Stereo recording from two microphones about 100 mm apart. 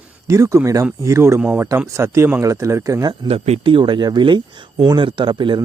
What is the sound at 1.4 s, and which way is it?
Speech, 15° right (ahead or behind).